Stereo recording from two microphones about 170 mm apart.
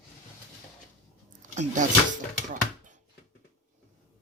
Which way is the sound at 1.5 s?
45° right (ahead or behind).